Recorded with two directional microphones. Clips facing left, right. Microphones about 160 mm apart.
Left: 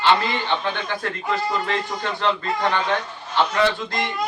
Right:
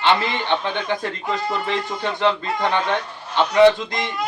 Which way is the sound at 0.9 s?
20° right (ahead or behind).